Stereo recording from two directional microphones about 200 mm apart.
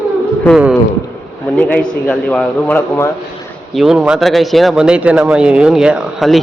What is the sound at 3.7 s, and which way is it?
Speech, centre (ahead or behind).